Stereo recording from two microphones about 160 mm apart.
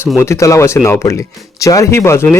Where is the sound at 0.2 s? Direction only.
20° left (ahead or behind).